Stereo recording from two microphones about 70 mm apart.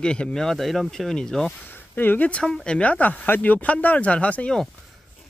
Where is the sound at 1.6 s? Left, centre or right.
Left.